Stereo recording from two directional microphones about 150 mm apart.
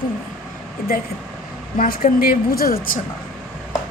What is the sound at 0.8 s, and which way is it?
A woman's voice, 70° left (ahead or behind).